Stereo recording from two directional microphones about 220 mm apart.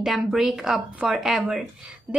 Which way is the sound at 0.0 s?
Centre (ahead or behind).